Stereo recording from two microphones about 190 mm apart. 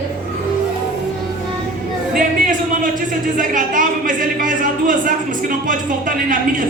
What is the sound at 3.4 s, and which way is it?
A woman's voice, 45° right (ahead or behind).